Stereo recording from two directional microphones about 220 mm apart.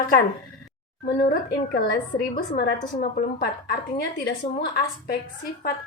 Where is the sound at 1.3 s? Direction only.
45° left (ahead or behind).